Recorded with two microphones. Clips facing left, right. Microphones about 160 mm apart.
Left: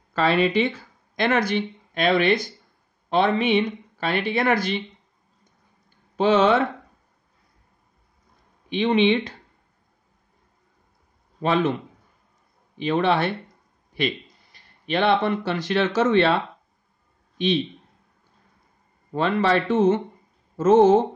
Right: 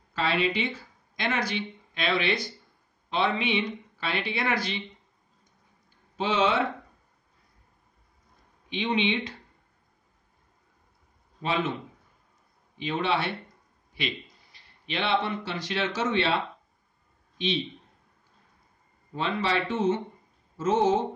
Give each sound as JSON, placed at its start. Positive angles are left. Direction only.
{"t": 0.1, "sound": "speech", "side_deg": 55}
{"t": 6.1, "sound": "speech", "side_deg": 55}
{"t": 8.6, "sound": "speech", "side_deg": 55}
{"t": 12.7, "sound": "speech", "side_deg": 60}
{"t": 19.1, "sound": "speech", "side_deg": 55}